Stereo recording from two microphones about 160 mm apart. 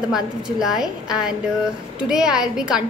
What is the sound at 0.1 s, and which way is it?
A woman's voice, centre (ahead or behind).